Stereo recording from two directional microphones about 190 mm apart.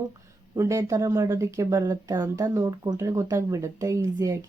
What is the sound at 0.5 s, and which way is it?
Speech, 15° right (ahead or behind).